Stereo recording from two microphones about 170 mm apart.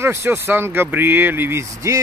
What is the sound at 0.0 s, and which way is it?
Speech, 15° right (ahead or behind).